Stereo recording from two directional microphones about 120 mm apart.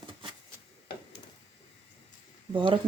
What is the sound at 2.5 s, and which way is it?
Speech, 45° right (ahead or behind).